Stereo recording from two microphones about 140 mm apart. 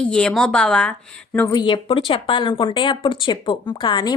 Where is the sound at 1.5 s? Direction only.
30° left (ahead or behind).